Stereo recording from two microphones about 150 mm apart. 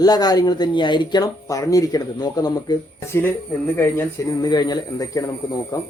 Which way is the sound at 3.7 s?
15° left (ahead or behind).